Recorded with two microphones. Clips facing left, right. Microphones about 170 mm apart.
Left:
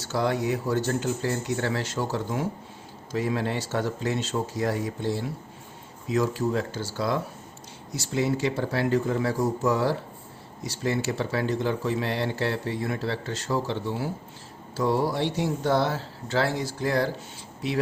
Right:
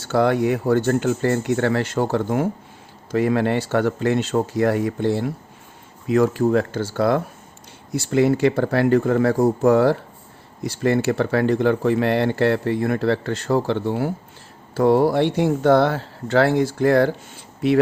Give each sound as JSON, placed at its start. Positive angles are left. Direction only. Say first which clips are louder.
{"t": 0.0, "sound": "speech", "louder": "right 8 dB", "side_deg": -60}